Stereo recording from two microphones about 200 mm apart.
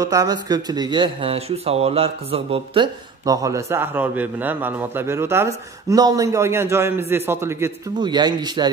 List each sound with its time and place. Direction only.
0.0 s speech: 15° right (ahead or behind)